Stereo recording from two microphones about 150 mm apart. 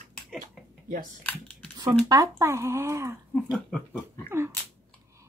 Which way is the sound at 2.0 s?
20° right (ahead or behind).